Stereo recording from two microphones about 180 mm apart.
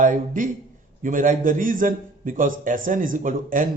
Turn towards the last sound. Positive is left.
turn(degrees=-50)  # may be behind; listen again after turning